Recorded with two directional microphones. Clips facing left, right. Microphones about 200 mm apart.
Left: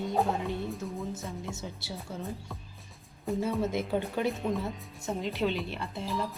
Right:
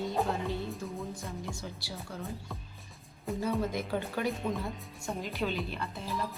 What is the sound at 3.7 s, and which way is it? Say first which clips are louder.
Speech: left 3 dB; 20° left (ahead or behind).